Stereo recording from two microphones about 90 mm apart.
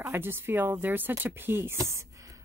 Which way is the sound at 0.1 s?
25° right (ahead or behind).